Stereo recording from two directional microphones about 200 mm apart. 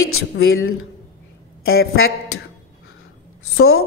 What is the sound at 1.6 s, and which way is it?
Speech, 50° left (ahead or behind).